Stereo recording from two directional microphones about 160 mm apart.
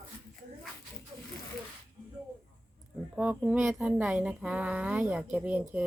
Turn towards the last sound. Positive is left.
turn(degrees=-10)  # may be behind; listen again after turning